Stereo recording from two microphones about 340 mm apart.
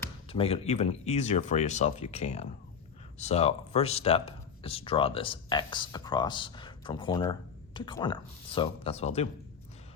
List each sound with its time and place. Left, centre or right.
0.0 s speech: centre